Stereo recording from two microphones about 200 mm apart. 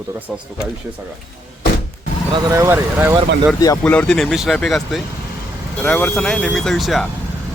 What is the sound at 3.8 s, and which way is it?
Speech, 5° left (ahead or behind).